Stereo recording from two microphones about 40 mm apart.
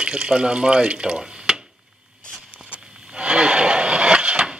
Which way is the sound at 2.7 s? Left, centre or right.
Right.